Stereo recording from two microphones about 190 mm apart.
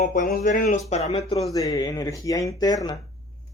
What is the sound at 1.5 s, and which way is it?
Speech, 20° left (ahead or behind).